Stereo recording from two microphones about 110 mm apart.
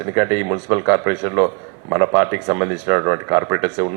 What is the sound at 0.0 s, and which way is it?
A man's voice, 25° right (ahead or behind).